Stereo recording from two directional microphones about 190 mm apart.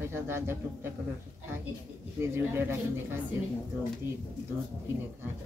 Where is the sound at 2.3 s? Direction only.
10° right (ahead or behind).